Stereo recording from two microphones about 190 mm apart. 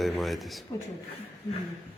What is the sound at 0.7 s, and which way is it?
Speech, 15° left (ahead or behind).